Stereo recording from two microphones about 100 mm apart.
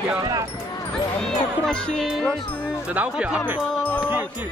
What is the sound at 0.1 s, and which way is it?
Speech, 40° right (ahead or behind).